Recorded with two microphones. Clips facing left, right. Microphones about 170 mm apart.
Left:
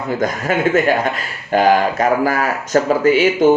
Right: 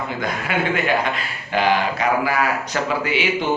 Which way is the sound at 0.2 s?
45° left (ahead or behind).